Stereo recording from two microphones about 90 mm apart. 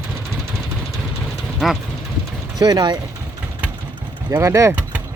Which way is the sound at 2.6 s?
50° right (ahead or behind).